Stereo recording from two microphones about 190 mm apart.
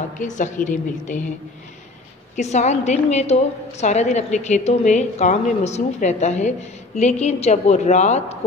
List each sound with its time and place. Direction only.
0.2 s a woman's voice: 40° left (ahead or behind)
2.3 s a woman's voice: 35° left (ahead or behind)